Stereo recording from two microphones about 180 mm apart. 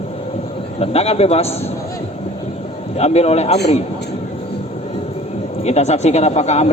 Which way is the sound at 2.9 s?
35° left (ahead or behind).